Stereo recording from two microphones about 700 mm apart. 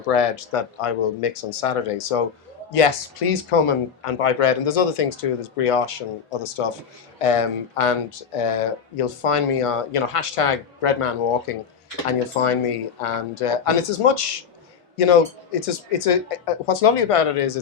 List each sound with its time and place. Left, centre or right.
0.1 s a man's voice: left